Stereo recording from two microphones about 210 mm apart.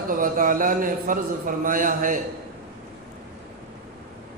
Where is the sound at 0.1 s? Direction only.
40° right (ahead or behind).